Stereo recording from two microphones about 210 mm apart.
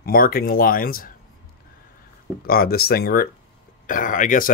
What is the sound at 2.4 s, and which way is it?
A man's voice, 45° left (ahead or behind).